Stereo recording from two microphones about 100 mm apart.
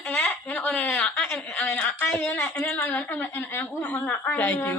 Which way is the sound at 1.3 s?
15° left (ahead or behind).